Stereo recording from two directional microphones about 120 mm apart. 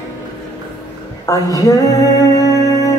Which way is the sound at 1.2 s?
30° left (ahead or behind).